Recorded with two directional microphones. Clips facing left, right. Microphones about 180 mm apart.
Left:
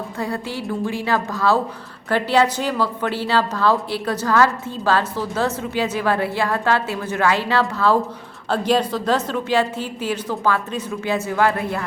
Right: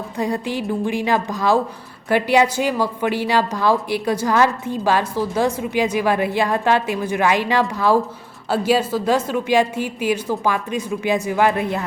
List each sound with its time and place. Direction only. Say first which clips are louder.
0.2 s a woman's voice: right 5 dB; 15° right (ahead or behind)